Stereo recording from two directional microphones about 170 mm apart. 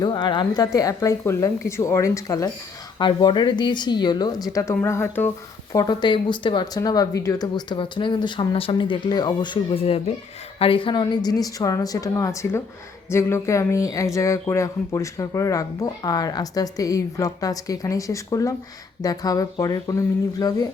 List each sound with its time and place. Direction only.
0.0 s speech: 25° left (ahead or behind)
5.7 s speech: 25° left (ahead or behind)